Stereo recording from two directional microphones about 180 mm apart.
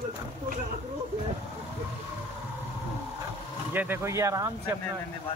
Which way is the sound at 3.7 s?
10° right (ahead or behind).